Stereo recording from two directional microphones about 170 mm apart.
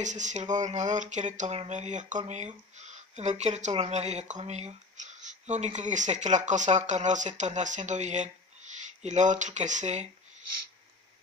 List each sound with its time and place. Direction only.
0.0 s speech: 45° right (ahead or behind)